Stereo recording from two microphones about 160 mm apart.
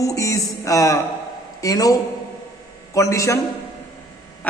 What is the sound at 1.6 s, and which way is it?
A man's voice, 25° left (ahead or behind).